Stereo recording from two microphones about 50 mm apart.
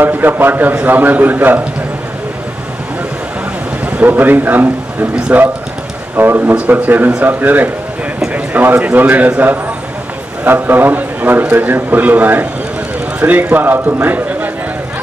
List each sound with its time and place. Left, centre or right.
0.0 s a man's voice: right
3.8 s a man's voice: right
6.5 s a man's voice: right
10.4 s a man's voice: right